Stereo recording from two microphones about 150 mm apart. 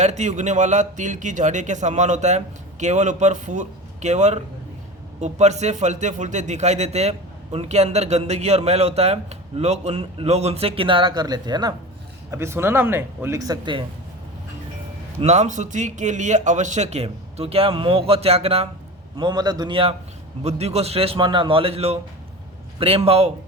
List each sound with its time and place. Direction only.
0.0 s speech: 50° right (ahead or behind); by 11.7 s 30° right (ahead or behind)
12.3 s speech: 15° right (ahead or behind)
15.2 s speech: 50° right (ahead or behind)
19.1 s a man's voice: 25° right (ahead or behind)
23.0 s a man's voice: 40° right (ahead or behind)